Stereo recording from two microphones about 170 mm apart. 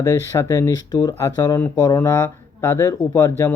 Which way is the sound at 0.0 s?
15° left (ahead or behind).